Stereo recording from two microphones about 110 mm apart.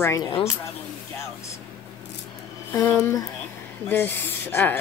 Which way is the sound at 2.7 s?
25° left (ahead or behind).